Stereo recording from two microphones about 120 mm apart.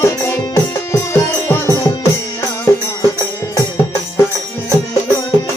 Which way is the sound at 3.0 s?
30° left (ahead or behind).